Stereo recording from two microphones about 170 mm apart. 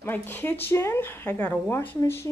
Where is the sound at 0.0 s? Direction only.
10° left (ahead or behind).